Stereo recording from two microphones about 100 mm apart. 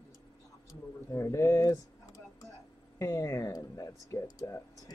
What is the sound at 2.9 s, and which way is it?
Speech, 30° left (ahead or behind).